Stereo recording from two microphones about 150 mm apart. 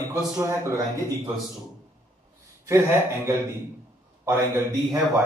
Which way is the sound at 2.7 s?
15° right (ahead or behind).